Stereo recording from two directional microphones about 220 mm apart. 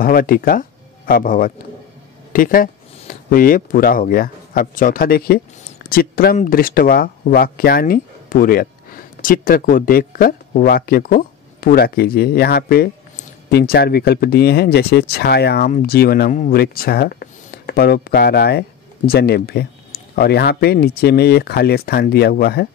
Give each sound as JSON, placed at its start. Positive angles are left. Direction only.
{"t": 0.0, "sound": "speech", "side_deg": 40}